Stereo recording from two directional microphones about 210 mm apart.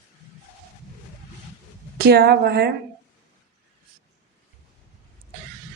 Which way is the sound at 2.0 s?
45° right (ahead or behind).